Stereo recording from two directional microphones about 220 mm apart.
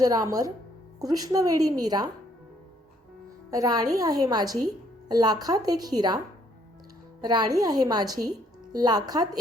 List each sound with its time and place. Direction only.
0.0 s a woman's voice: 15° right (ahead or behind)
3.5 s a woman's voice: 15° right (ahead or behind)
7.2 s a woman's voice: 20° right (ahead or behind)